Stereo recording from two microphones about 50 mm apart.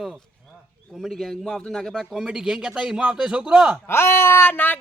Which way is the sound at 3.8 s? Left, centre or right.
Left.